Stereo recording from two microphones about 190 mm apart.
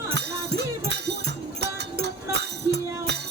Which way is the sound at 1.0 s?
60° right (ahead or behind).